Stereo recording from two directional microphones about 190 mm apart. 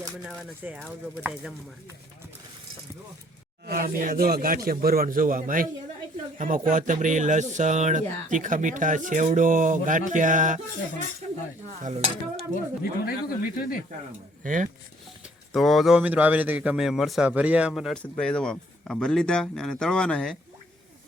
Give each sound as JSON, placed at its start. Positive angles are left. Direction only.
{"t": 0.6, "sound": "a man's voice", "side_deg": -5}
{"t": 3.7, "sound": "speech", "side_deg": -50}
{"t": 11.8, "sound": "stir", "side_deg": -40}
{"t": 12.8, "sound": "speech", "side_deg": 50}
{"t": 14.4, "sound": "speech", "side_deg": -45}
{"t": 15.5, "sound": "a man's voice", "side_deg": 0}